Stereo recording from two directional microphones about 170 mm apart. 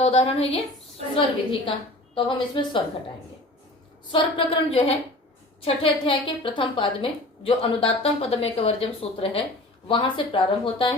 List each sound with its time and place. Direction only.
0.0 s a woman's voice: 35° left (ahead or behind)
4.1 s a woman's voice: 35° left (ahead or behind)